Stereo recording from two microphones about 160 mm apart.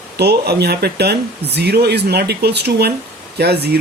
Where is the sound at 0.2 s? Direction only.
90° right.